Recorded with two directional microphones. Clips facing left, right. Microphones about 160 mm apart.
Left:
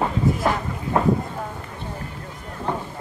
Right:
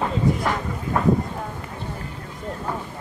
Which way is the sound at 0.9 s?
25° left (ahead or behind).